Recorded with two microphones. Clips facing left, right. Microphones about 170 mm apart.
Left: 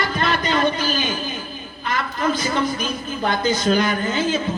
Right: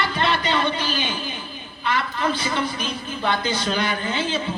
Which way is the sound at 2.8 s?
40° left (ahead or behind).